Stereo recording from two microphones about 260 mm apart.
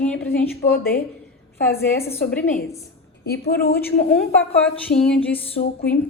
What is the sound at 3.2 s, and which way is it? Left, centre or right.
Speech, left.